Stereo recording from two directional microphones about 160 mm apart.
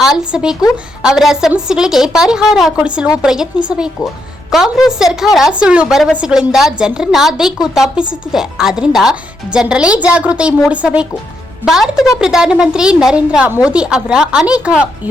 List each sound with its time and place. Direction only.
0.3 s a woman's voice: 5° right (ahead or behind)
11.9 s speech: 20° left (ahead or behind)
12.2 s a woman's voice: 5° right (ahead or behind)